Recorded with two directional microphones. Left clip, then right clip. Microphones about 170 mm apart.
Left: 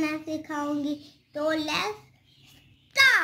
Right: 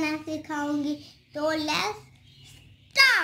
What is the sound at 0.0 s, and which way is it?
A woman's voice, centre (ahead or behind).